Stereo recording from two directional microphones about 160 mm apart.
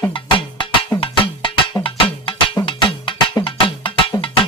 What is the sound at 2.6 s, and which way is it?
Music, 35° left (ahead or behind).